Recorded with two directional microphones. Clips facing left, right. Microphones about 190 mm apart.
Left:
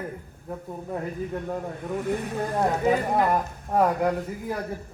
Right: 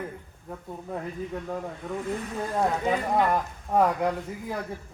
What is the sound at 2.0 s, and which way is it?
Speech, 60° left (ahead or behind).